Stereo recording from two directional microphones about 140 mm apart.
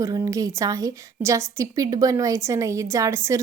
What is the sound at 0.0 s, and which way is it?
A woman's voice, 25° right (ahead or behind).